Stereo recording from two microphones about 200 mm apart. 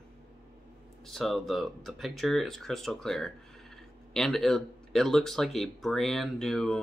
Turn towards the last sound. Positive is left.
turn(degrees=0)  # may be behind; listen again after turning